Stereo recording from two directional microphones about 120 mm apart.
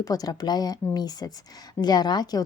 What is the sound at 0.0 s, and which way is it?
Speech, 30° left (ahead or behind).